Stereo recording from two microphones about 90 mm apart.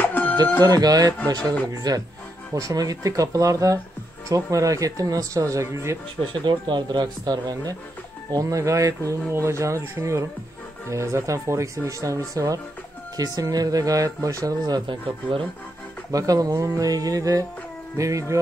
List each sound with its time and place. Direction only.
0.0 s a sound: 20° left (ahead or behind)
0.6 s speech: 50° right (ahead or behind)
6.4 s speech: 60° right (ahead or behind); by 12.2 s 35° right (ahead or behind)
13.4 s speech: 45° right (ahead or behind)
14.9 s speech: 80° right
16.1 s speech: 40° right (ahead or behind)